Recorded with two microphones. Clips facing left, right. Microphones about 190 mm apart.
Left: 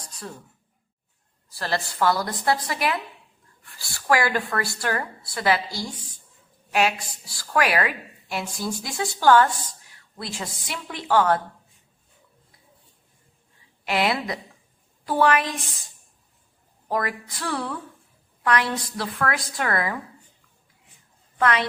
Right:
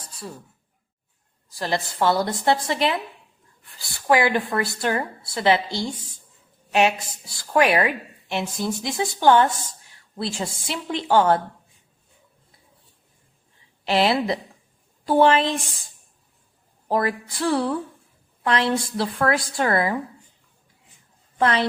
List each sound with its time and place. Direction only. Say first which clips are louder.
0.0 s a sound: right 1 dB; 5° right (ahead or behind)
1.5 s a woman's voice: right 2 dB; 15° right (ahead or behind)
13.8 s a woman's voice: right 4 dB; 30° right (ahead or behind)
16.9 s a woman's voice: right 4 dB; 30° right (ahead or behind)
21.3 s a woman's voice: right 2 dB; 30° right (ahead or behind)